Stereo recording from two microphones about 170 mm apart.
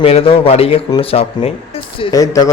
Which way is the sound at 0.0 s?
35° left (ahead or behind).